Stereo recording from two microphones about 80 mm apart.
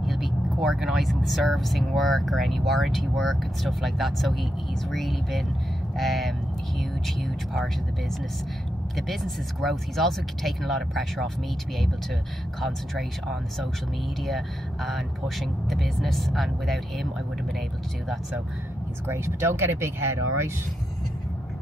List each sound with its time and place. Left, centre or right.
0.0 s speech: centre
8.9 s speech: centre
12.5 s speech: centre
19.0 s speech: right